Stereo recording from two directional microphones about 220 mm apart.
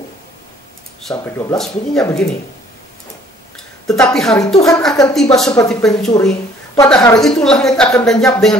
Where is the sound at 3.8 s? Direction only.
Centre (ahead or behind).